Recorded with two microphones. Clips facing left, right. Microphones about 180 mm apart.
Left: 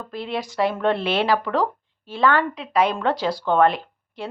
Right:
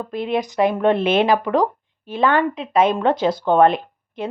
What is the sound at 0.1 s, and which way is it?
Speech, 20° right (ahead or behind).